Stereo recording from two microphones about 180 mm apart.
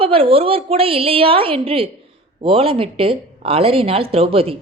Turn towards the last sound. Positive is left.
turn(degrees=-30)  # may be behind; listen again after turning